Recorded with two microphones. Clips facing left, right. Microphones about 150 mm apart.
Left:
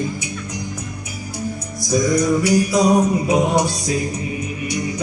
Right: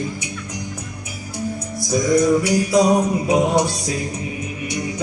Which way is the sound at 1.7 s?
25° right (ahead or behind).